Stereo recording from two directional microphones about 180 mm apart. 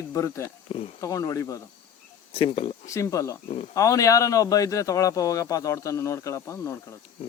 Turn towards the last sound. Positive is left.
turn(degrees=15)  # may be behind; listen again after turning